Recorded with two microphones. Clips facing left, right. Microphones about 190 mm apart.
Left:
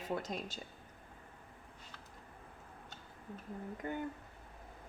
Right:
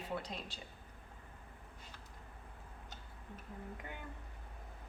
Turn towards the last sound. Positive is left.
turn(degrees=45)  # may be behind; listen again after turning